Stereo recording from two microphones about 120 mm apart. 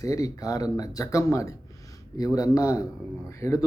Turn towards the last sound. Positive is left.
turn(degrees=25)  # may be behind; listen again after turning